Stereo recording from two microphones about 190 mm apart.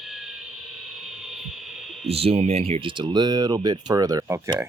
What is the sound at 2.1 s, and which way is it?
Speech, 30° right (ahead or behind).